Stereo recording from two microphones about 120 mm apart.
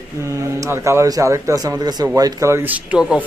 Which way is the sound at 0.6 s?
25° right (ahead or behind).